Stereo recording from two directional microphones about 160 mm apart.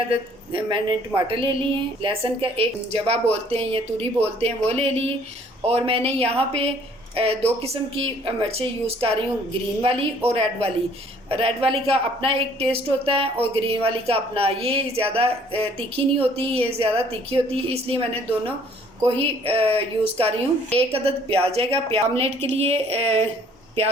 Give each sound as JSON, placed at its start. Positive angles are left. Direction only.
{"t": 0.5, "sound": "speech", "side_deg": -30}